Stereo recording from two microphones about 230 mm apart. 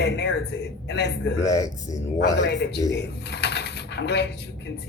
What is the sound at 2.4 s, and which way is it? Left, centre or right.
A man's voice, left.